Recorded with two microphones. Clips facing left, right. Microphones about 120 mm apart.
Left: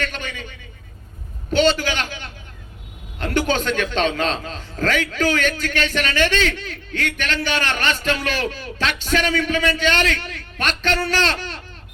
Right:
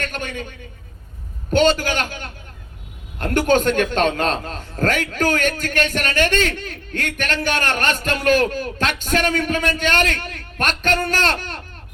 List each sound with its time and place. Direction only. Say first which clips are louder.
0.0 s a man's voice: right 1 dB; 45° right (ahead or behind)
1.5 s a man's voice: right 1 dB; 45° right (ahead or behind)